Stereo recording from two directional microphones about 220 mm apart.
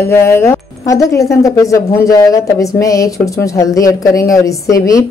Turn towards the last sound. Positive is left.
turn(degrees=15)  # may be behind; listen again after turning